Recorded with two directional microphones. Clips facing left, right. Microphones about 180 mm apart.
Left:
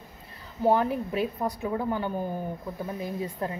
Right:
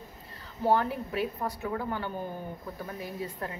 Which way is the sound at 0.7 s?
15° left (ahead or behind).